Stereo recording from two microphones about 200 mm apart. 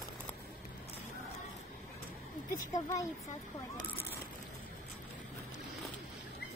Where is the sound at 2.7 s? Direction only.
15° left (ahead or behind).